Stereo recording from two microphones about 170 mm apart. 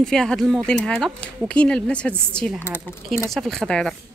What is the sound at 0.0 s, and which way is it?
Speech, 5° left (ahead or behind).